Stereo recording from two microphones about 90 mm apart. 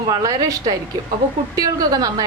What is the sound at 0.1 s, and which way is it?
A woman's voice, 45° right (ahead or behind).